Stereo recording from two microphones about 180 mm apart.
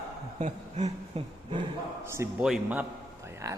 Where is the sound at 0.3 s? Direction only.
40° right (ahead or behind).